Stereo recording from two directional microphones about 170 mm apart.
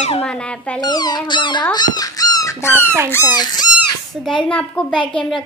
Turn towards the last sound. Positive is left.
turn(degrees=5)  # may be behind; listen again after turning